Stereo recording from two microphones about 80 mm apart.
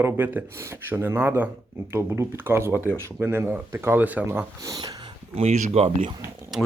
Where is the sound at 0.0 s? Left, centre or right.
Right.